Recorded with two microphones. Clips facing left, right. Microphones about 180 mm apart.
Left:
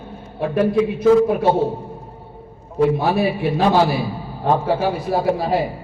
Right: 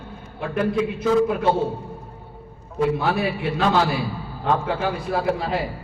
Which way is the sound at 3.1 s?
15° left (ahead or behind).